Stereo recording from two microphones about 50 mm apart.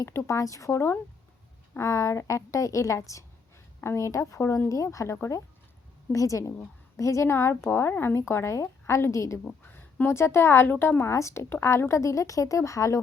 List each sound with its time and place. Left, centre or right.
0.0 s a woman's voice: left
4.8 s a woman's voice: left
7.3 s a woman's voice: left
8.2 s a woman's voice: left
9.4 s a sound: left
10.1 s a woman's voice: left
10.8 s a woman's voice: left
11.1 s a woman's voice: left
11.4 s a woman's voice: left
11.7 s a woman's voice: left